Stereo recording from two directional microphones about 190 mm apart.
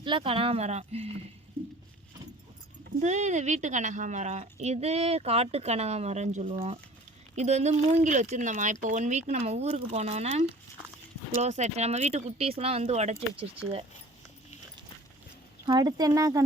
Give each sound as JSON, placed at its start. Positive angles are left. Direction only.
{"t": 0.0, "sound": "speech", "side_deg": -25}
{"t": 3.0, "sound": "speech", "side_deg": -40}
{"t": 11.4, "sound": "speech", "side_deg": -35}
{"t": 15.6, "sound": "speech", "side_deg": -20}